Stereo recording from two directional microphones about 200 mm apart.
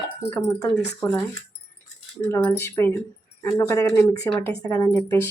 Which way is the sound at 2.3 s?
10° left (ahead or behind).